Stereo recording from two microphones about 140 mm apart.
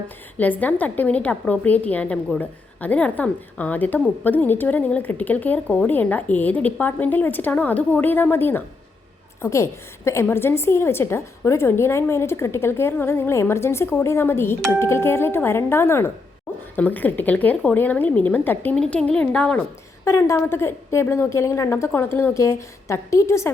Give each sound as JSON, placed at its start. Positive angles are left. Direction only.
{"t": 0.3, "sound": "a woman's voice", "side_deg": 10}
{"t": 20.1, "sound": "a woman's voice", "side_deg": 20}